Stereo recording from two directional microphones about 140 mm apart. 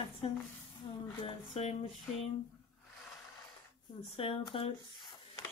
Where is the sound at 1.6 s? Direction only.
50° left (ahead or behind).